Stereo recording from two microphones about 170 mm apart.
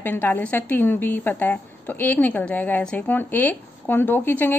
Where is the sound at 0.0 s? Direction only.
10° left (ahead or behind).